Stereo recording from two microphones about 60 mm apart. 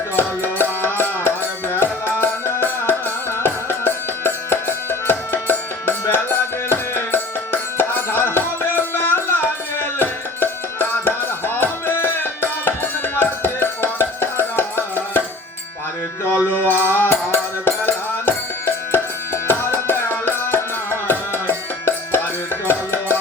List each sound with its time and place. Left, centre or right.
0.2 s music: left
16.6 s music: left